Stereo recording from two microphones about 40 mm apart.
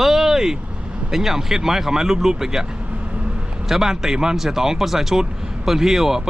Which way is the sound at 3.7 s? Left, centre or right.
Centre.